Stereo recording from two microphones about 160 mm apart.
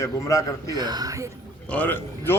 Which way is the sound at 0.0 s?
20° left (ahead or behind).